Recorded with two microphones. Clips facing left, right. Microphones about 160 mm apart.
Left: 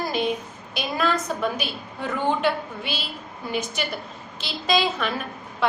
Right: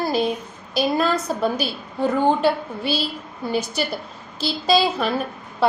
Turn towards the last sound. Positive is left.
turn(degrees=-35)  # may be behind; listen again after turning